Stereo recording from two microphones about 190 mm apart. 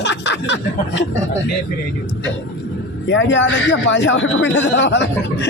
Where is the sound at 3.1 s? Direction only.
75° left (ahead or behind).